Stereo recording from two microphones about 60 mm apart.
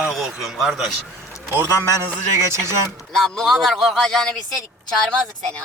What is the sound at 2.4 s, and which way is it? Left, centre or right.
Speech, right.